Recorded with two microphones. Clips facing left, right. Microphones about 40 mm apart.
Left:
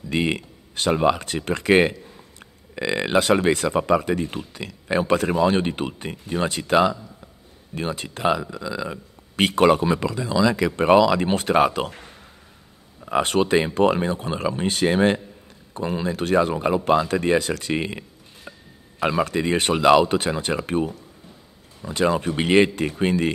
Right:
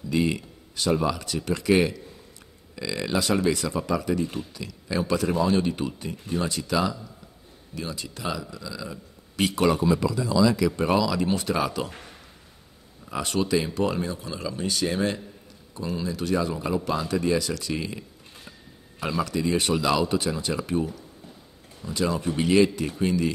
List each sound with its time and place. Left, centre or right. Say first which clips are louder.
0.1 s speech: left 2 dB; left
13.0 s speech: left 7 dB; left